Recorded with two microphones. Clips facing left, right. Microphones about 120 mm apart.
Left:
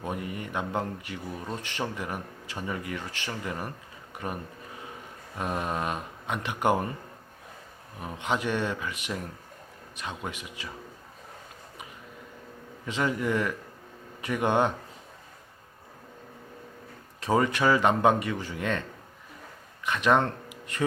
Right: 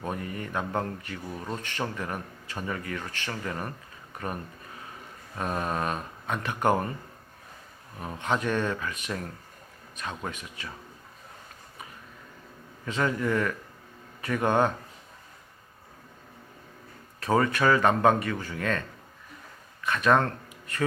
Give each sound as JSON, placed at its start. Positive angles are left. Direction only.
{"t": 0.0, "sound": "speech", "side_deg": 15}
{"t": 5.4, "sound": "speech", "side_deg": 10}
{"t": 7.9, "sound": "speech", "side_deg": 15}
{"t": 12.8, "sound": "speech", "side_deg": 15}
{"t": 17.2, "sound": "speech", "side_deg": 15}
{"t": 19.8, "sound": "speech", "side_deg": 15}